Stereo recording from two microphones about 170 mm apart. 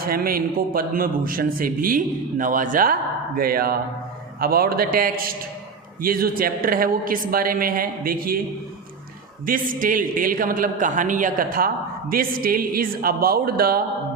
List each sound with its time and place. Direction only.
0.0 s a man's voice: 60° right (ahead or behind)
9.5 s a man's voice: 55° right (ahead or behind)